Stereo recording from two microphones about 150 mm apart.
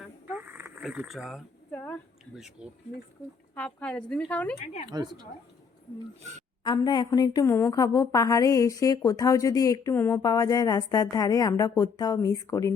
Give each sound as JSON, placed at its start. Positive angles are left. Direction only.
{"t": 0.3, "sound": "a sound", "side_deg": -15}
{"t": 0.8, "sound": "speech", "side_deg": 0}
{"t": 1.7, "sound": "a sound", "side_deg": 10}
{"t": 2.3, "sound": "speech", "side_deg": -5}
{"t": 3.5, "sound": "speech", "side_deg": 10}
{"t": 4.5, "sound": "speech", "side_deg": 50}
{"t": 4.9, "sound": "a woman's voice", "side_deg": -30}
{"t": 6.3, "sound": "a woman's voice", "side_deg": -50}
{"t": 6.7, "sound": "a woman's voice", "side_deg": 30}